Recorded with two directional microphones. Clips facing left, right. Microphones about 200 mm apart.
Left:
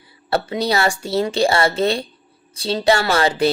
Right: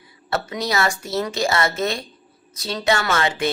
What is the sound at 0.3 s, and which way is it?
A woman's voice, 30° left (ahead or behind).